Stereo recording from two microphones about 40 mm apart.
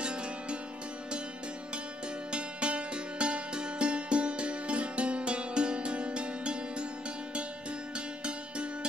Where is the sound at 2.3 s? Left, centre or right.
Right.